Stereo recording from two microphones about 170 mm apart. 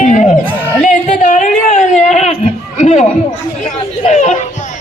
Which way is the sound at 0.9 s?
50° left (ahead or behind).